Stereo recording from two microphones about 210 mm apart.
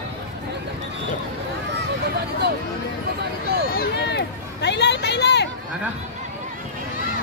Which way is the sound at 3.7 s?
50° left (ahead or behind).